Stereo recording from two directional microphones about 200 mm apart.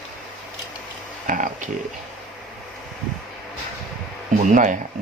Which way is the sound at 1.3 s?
40° right (ahead or behind).